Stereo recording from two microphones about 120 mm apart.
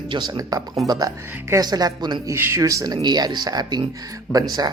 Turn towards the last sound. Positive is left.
turn(degrees=-30)  # may be behind; listen again after turning